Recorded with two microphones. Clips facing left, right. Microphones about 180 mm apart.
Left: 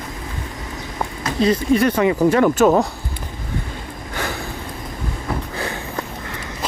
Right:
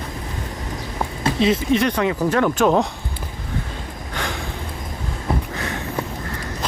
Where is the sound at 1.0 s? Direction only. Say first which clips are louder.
Even; centre (ahead or behind).